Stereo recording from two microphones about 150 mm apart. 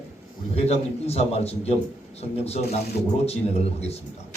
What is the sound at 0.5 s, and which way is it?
A man's voice, 45° left (ahead or behind).